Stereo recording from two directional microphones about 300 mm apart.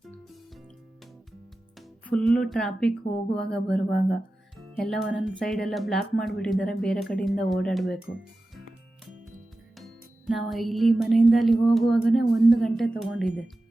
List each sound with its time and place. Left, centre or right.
2.0 s speech: centre
9.7 s music: centre
12.5 s speech: centre